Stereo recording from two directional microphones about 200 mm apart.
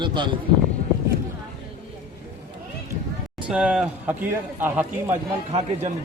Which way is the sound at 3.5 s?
5° right (ahead or behind).